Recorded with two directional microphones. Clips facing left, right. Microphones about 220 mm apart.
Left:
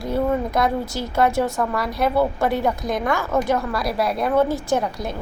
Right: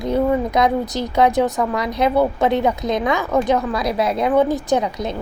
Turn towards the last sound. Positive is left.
turn(degrees=-20)  # may be behind; listen again after turning